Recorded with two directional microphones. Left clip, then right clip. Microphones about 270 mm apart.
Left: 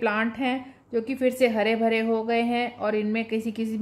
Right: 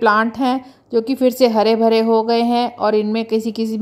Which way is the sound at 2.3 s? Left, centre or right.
Right.